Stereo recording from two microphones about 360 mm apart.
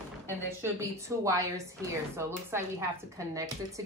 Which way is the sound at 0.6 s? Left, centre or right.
Centre.